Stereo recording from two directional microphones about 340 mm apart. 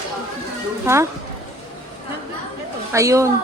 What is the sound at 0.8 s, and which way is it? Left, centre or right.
Speech, centre.